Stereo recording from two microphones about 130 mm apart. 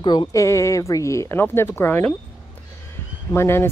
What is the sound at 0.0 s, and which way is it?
Speech, 35° left (ahead or behind).